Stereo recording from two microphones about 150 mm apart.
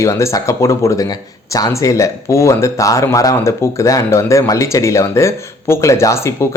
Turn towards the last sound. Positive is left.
turn(degrees=20)  # may be behind; listen again after turning